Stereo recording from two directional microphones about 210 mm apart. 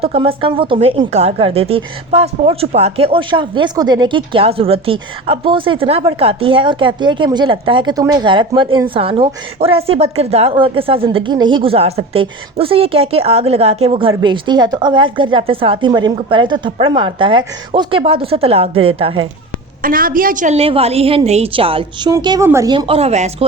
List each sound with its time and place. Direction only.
0.0 s a woman's voice: 25° right (ahead or behind)
19.8 s a woman's voice: 40° right (ahead or behind)